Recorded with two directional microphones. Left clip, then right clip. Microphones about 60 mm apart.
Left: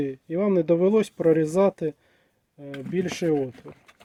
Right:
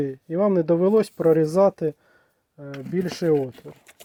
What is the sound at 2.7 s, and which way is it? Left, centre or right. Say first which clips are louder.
Speech: right 1 dB; left.